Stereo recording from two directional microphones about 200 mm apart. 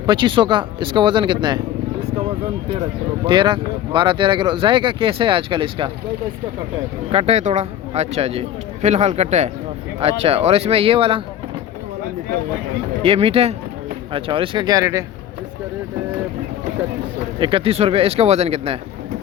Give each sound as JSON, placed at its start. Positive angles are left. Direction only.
{"t": 0.0, "sound": "speech", "side_deg": -20}
{"t": 3.2, "sound": "speech", "side_deg": -20}
{"t": 7.1, "sound": "a man's voice", "side_deg": -30}
{"t": 13.0, "sound": "speech", "side_deg": -30}
{"t": 17.4, "sound": "speech", "side_deg": -25}